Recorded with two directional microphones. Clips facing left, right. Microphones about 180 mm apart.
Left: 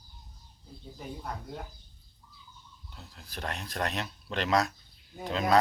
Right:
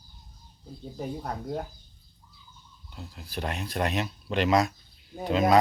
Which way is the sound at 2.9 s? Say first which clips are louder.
Right 8 dB; 5° right (ahead or behind).